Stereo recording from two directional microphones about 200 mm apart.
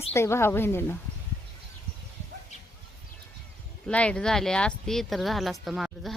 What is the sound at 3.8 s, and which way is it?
Speech, 5° left (ahead or behind).